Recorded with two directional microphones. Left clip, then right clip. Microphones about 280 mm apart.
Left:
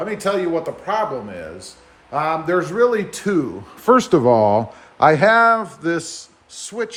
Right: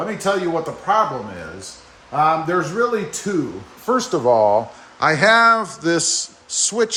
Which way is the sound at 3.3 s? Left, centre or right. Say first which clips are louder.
Left 3 dB; centre.